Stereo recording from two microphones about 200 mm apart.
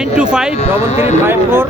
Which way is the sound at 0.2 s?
5° right (ahead or behind).